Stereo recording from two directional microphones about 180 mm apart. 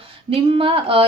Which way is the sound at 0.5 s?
30° right (ahead or behind).